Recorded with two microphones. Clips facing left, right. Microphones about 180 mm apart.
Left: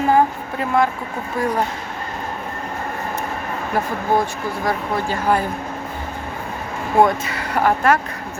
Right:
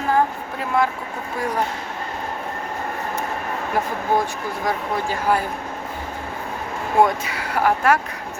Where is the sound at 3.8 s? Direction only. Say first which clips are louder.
Left 1 dB; 15° right (ahead or behind).